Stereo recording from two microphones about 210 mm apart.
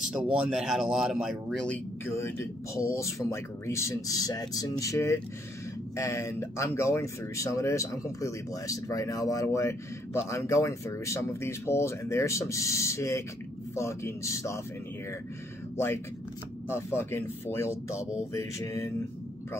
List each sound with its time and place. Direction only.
0.1 s speech: 5° right (ahead or behind); by 14.6 s 15° left (ahead or behind)
16.6 s speech: 10° left (ahead or behind)